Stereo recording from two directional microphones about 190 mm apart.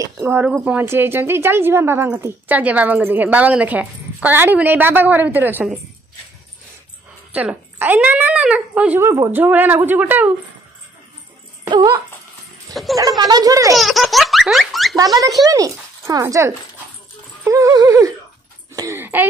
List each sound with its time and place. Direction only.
0.0 s a woman's voice: 15° right (ahead or behind)
7.3 s a woman's voice: 10° right (ahead or behind)
11.7 s a child's voice: 20° right (ahead or behind)
12.7 s speech: centre (ahead or behind)
13.2 s a child's voice: 20° right (ahead or behind)
13.7 s laughter: centre (ahead or behind)
15.4 s speech: 20° right (ahead or behind)
17.5 s a sound: 15° right (ahead or behind)